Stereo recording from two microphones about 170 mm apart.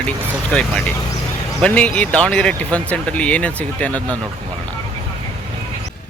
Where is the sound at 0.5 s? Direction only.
5° left (ahead or behind).